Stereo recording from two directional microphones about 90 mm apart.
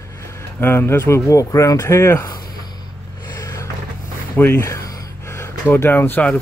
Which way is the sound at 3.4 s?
40° left (ahead or behind).